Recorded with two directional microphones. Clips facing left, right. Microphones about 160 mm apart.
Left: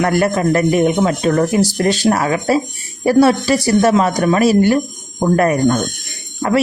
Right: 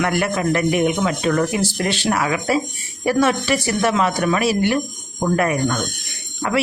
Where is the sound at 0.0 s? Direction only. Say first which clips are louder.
Left 5 dB; 40° left (ahead or behind).